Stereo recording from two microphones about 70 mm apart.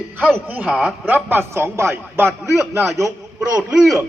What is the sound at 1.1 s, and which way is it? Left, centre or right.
Speech, right.